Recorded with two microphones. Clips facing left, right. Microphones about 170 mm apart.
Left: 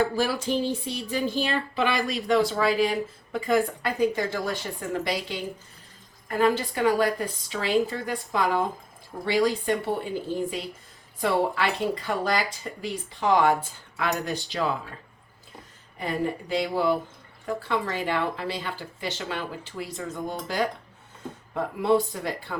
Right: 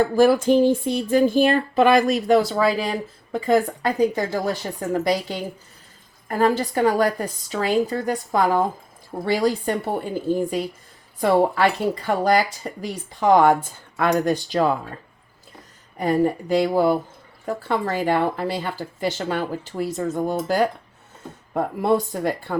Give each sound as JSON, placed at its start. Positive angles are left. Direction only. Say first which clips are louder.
{"t": 0.2, "sound": "a woman's voice", "louder": "right 10 dB", "side_deg": -50}
{"t": 16.0, "sound": "speech", "louder": "right 8 dB", "side_deg": -45}